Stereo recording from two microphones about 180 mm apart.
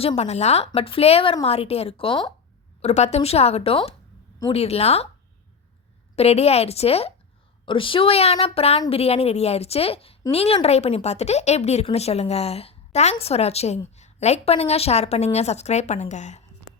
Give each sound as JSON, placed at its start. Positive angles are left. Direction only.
{"t": 0.0, "sound": "speech", "side_deg": 35}
{"t": 2.8, "sound": "speech", "side_deg": 35}
{"t": 6.1, "sound": "speech", "side_deg": 35}